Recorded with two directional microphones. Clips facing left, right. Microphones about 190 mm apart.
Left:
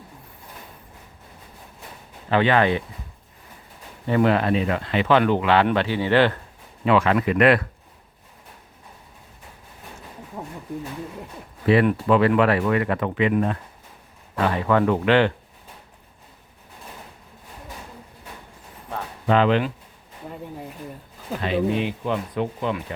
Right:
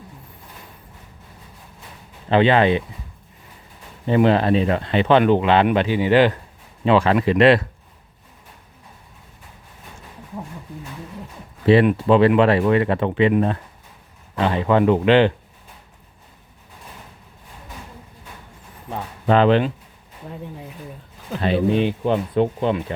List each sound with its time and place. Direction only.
2.3 s speech: 20° right (ahead or behind)
4.0 s speech: 25° right (ahead or behind)
6.8 s speech: 30° right (ahead or behind)
11.6 s speech: 25° right (ahead or behind)
19.3 s speech: 35° right (ahead or behind)
20.3 s speech: centre (ahead or behind)
21.4 s speech: 30° right (ahead or behind)